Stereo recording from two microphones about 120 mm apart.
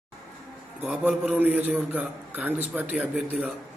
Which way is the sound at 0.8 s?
15° right (ahead or behind).